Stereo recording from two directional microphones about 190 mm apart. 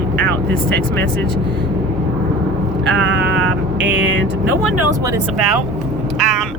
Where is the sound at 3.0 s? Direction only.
75° right (ahead or behind).